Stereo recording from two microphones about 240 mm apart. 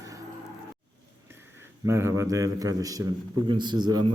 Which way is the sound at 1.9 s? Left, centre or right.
Centre.